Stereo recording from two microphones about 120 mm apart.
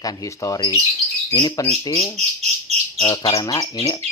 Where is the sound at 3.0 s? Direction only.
40° left (ahead or behind).